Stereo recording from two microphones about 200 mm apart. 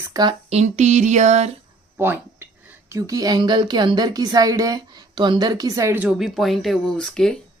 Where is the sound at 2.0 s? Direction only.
10° right (ahead or behind).